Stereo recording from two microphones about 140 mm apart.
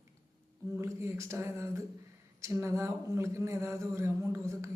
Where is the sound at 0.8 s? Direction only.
20° right (ahead or behind).